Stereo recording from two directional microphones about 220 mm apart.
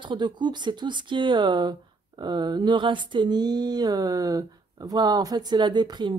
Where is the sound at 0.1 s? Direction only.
20° right (ahead or behind).